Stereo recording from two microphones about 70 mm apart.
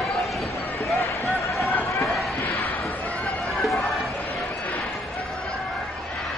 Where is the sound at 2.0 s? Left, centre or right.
Centre.